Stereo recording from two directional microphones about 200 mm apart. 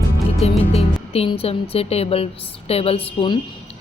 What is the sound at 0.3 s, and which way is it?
Speech, 30° left (ahead or behind).